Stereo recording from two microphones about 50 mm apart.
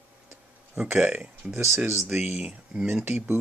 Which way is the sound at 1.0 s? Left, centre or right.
Right.